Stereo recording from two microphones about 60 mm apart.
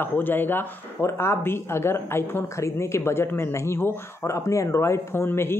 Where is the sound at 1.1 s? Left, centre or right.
Left.